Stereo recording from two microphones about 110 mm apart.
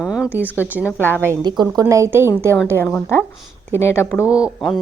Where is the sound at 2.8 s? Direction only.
20° left (ahead or behind).